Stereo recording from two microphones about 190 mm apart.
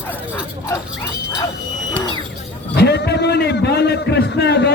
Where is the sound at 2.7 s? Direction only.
60° left (ahead or behind).